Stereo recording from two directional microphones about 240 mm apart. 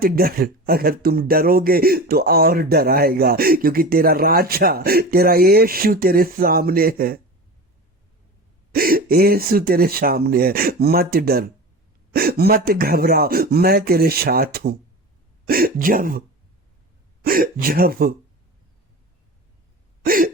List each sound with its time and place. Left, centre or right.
0.0 s speech: right
8.7 s speech: right
17.2 s speech: right
20.1 s speech: right